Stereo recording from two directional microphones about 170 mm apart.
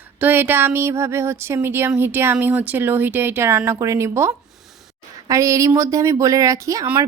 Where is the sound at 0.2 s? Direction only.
10° right (ahead or behind).